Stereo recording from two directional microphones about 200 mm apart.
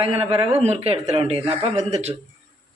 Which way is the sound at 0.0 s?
30° right (ahead or behind).